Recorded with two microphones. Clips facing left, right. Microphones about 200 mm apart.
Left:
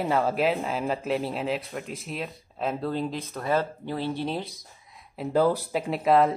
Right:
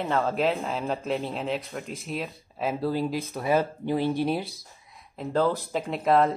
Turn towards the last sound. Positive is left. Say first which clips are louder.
# left 1 dB
turn(degrees=0)  # may be behind; listen again after turning